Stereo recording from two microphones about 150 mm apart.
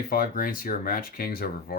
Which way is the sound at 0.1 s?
75° left (ahead or behind).